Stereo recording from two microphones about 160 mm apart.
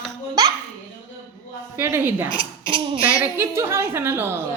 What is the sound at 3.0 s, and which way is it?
A woman's voice, 15° right (ahead or behind).